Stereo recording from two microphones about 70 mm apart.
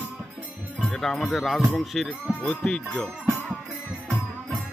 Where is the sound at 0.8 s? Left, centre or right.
Centre.